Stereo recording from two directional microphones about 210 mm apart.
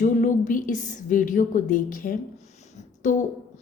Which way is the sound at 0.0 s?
40° left (ahead or behind).